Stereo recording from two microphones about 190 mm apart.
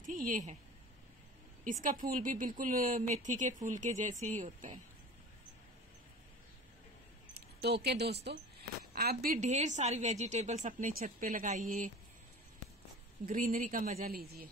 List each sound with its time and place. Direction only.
0.0 s a woman's voice: 45° right (ahead or behind)
1.6 s speech: 45° right (ahead or behind)
7.3 s speech: 60° right (ahead or behind)
9.2 s a woman's voice: 45° right (ahead or behind)
13.2 s speech: 45° right (ahead or behind)